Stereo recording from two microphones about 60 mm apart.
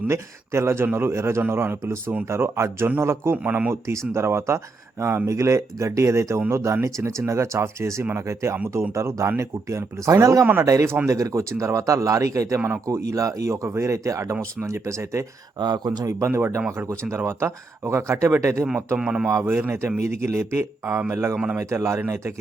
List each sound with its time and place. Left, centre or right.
0.1 s speech: right
3.4 s speech: right
3.8 s speech: right
16.3 s speech: right
18.9 s speech: centre
19.3 s speech: right
19.5 s speech: right
20.0 s speech: right